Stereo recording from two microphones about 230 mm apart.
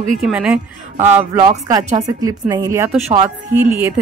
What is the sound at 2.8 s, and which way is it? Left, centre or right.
Speech, right.